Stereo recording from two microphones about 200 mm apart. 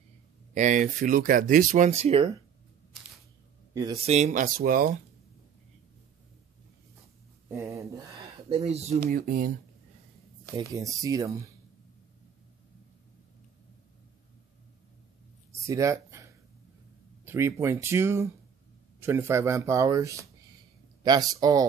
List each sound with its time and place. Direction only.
0.6 s speech: 40° right (ahead or behind)
3.9 s speech: 30° right (ahead or behind)
7.4 s speech: 15° right (ahead or behind)
8.5 s speech: 30° right (ahead or behind)
9.1 s speech: 45° right (ahead or behind)
10.7 s speech: 15° right (ahead or behind)
15.6 s a sound: 15° right (ahead or behind)
17.2 s speech: 10° right (ahead or behind)